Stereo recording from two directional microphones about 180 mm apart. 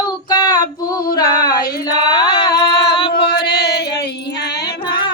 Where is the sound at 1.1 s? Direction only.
20° left (ahead or behind).